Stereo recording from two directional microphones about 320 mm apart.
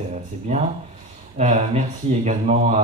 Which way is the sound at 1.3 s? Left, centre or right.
Right.